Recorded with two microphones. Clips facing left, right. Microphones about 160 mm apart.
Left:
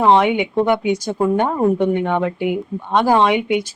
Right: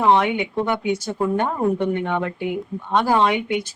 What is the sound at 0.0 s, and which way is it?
Speech, 20° left (ahead or behind).